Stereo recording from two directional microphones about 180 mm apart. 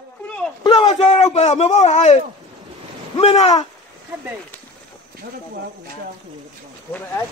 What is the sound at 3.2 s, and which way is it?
Speech, 35° left (ahead or behind).